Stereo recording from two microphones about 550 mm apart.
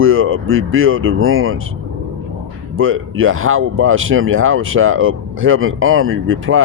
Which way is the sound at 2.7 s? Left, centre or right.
Right.